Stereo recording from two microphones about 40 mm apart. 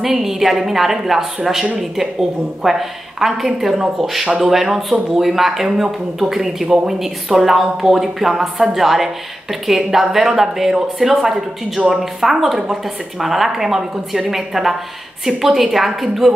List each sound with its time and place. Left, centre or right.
0.0 s a woman's voice: centre